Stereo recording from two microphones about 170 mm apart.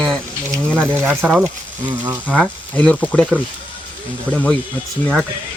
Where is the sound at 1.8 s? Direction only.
30° right (ahead or behind).